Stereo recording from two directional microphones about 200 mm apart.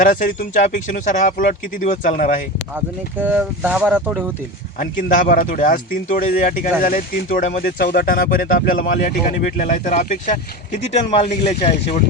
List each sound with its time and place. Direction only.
0.0 s speech: 45° left (ahead or behind)
3.2 s speech: 10° right (ahead or behind)
4.8 s speech: 40° left (ahead or behind)